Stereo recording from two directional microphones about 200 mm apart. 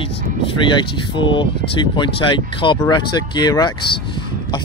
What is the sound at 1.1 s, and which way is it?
Speech, 25° left (ahead or behind).